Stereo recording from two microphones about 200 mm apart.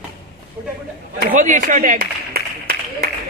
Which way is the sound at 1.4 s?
40° right (ahead or behind).